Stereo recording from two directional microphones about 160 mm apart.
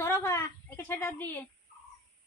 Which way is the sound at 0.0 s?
15° left (ahead or behind).